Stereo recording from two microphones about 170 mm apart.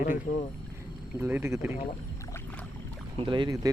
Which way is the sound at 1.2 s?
10° right (ahead or behind).